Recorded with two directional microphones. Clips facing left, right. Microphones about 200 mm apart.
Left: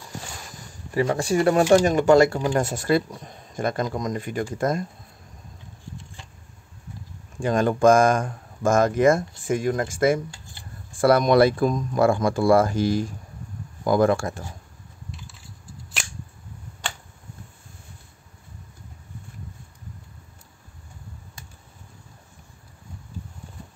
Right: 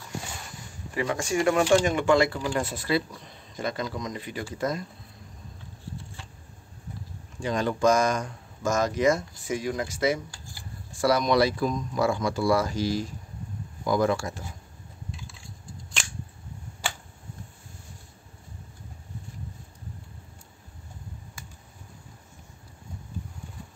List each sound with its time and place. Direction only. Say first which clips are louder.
0.9 s speech: left 5 dB; 35° left (ahead or behind)
7.3 s speech: left 6 dB; 50° left (ahead or behind)
10.3 s a sound: even; 20° left (ahead or behind)
10.9 s speech: left 5 dB; 55° left (ahead or behind)
15.0 s crushing: even; centre (ahead or behind)